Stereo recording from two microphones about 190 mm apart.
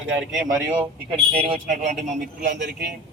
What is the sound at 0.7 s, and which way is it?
A man's voice, 30° right (ahead or behind).